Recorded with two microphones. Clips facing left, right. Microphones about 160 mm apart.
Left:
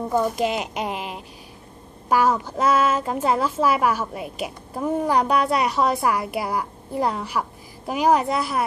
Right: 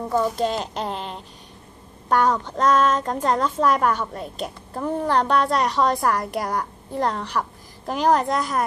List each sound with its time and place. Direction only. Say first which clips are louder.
0.2 s a woman's voice: even; 10° left (ahead or behind)